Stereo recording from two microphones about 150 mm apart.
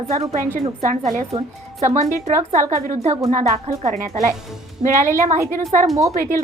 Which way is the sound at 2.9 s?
50° right (ahead or behind).